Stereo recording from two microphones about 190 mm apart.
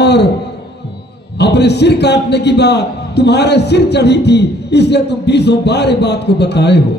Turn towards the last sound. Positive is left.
turn(degrees=60)  # may be behind; listen again after turning